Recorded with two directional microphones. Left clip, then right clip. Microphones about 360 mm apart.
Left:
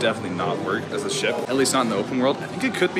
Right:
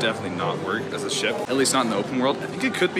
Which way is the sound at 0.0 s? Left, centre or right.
Centre.